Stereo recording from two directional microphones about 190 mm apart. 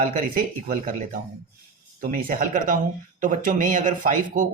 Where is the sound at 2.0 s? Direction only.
45° right (ahead or behind).